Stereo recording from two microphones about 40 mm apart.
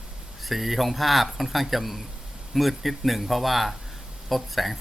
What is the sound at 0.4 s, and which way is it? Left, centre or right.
Speech, centre.